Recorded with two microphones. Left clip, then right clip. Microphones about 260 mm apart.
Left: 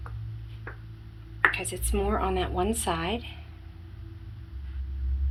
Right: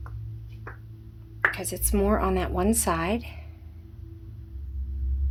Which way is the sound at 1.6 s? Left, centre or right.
Right.